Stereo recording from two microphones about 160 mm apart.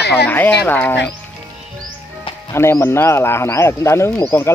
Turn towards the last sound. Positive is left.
turn(degrees=15)  # may be behind; listen again after turning